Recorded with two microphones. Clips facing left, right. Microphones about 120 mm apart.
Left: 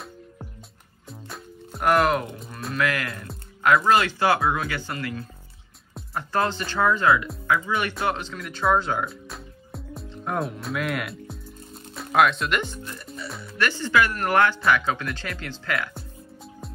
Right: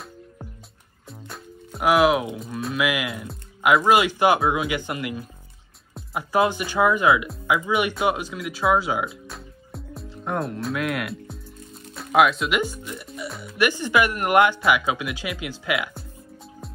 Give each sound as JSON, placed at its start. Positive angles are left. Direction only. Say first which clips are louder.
{"t": 1.0, "sound": "music", "louder": "even", "side_deg": 0}
{"t": 3.8, "sound": "speech", "louder": "right 2 dB", "side_deg": -15}